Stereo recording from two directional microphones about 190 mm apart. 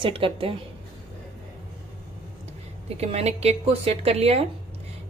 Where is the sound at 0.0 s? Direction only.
30° right (ahead or behind).